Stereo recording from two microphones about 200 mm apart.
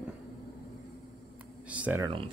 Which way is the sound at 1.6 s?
5° right (ahead or behind).